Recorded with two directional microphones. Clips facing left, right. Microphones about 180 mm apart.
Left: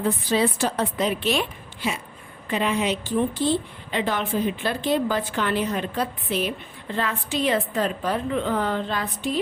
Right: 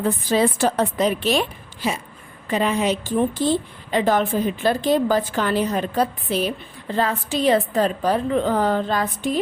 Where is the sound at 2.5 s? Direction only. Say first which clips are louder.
Right 3 dB; 40° right (ahead or behind).